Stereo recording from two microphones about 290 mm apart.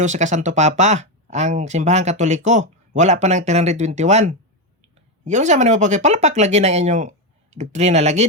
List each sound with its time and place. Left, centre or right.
0.0 s speech: right